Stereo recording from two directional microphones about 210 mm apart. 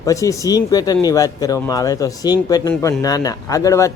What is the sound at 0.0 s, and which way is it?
A man's voice, 15° left (ahead or behind).